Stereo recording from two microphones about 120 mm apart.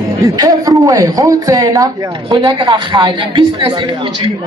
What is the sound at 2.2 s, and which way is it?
A woman's voice, 40° right (ahead or behind).